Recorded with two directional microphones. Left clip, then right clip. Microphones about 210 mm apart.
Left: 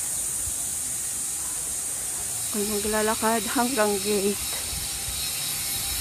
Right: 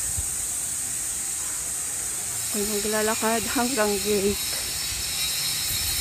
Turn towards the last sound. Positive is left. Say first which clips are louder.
# even
turn(degrees=0)  # may be behind; listen again after turning